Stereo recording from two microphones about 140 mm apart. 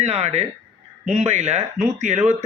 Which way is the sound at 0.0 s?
55° right (ahead or behind).